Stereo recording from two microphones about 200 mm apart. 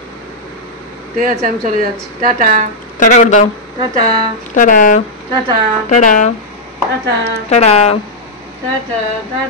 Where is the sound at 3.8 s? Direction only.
20° right (ahead or behind).